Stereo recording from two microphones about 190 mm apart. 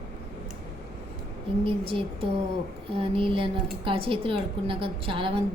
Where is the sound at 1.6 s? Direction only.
30° right (ahead or behind).